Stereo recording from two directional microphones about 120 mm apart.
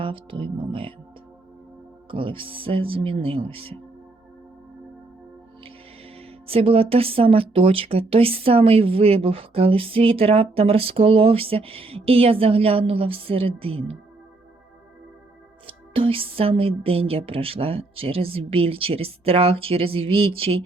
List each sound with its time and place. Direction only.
0.0 s speech: 45° right (ahead or behind)
2.0 s speech: 45° right (ahead or behind)
6.1 s speech: 55° right (ahead or behind)
15.6 s speech: 50° right (ahead or behind)